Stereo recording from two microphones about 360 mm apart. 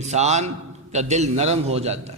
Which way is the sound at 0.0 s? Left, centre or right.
Centre.